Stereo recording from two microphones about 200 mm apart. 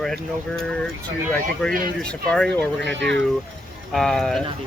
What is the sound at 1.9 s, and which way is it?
Speech, 5° left (ahead or behind).